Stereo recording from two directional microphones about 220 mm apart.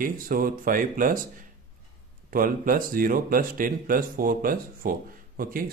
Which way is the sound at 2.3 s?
40° right (ahead or behind).